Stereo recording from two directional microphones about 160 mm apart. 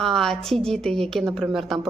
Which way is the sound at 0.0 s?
Centre (ahead or behind).